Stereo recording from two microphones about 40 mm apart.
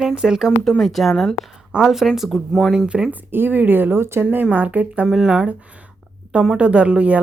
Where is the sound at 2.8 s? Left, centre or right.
Right.